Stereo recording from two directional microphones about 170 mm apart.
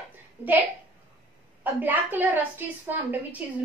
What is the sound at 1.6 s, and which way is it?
A woman's voice, 10° right (ahead or behind).